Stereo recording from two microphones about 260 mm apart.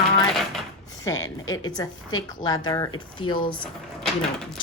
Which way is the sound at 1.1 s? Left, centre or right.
Centre.